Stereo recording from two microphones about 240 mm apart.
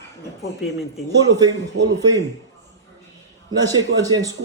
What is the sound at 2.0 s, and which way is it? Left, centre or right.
Speech, centre.